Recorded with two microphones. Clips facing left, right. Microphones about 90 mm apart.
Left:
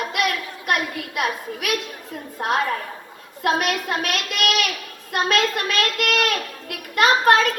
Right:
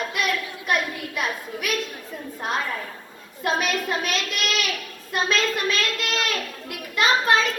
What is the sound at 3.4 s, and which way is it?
A child's voice, 60° left (ahead or behind).